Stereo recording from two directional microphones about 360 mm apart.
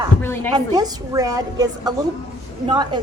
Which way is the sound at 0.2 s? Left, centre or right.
Centre.